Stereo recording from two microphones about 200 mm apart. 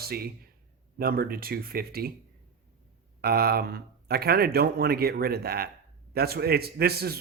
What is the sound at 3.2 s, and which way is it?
A man's voice, 50° right (ahead or behind).